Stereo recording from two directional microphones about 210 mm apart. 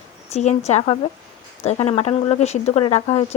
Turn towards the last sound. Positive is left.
turn(degrees=30)  # may be behind; listen again after turning